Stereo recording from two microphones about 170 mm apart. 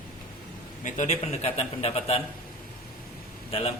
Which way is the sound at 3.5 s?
35° left (ahead or behind).